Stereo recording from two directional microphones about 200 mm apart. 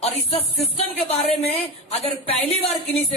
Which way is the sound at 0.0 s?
30° left (ahead or behind).